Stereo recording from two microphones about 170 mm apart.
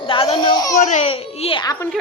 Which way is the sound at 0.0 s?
30° left (ahead or behind).